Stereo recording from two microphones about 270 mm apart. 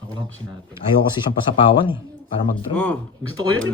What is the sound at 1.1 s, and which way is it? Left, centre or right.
Speech, centre.